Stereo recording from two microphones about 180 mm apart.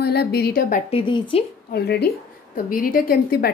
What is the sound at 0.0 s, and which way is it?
Speech, 60° left (ahead or behind).